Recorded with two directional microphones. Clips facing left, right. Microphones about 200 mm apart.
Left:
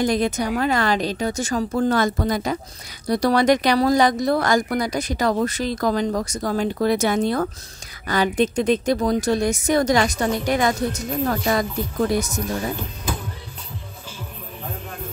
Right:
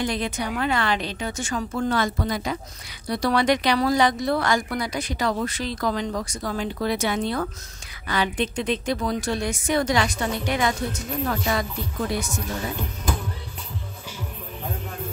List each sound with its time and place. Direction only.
0.0 s a woman's voice: 40° left (ahead or behind)